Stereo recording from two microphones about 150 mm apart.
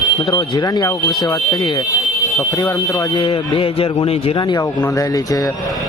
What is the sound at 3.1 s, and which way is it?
A man's voice, 35° left (ahead or behind).